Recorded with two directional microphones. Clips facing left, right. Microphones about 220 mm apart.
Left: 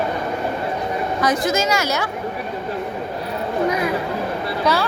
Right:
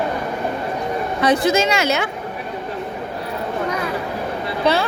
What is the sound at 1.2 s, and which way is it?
Speech, 30° right (ahead or behind).